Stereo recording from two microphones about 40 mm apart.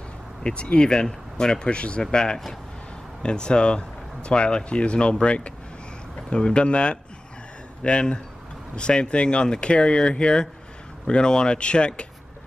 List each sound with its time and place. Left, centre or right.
0.4 s speech: left
1.7 s speech: left